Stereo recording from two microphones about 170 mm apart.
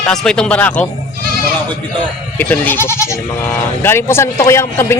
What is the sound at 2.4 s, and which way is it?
Speech, 10° left (ahead or behind).